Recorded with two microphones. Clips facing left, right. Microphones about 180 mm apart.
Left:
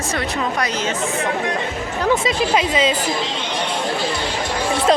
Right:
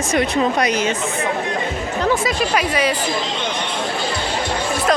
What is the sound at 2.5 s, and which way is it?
Speech, 20° left (ahead or behind).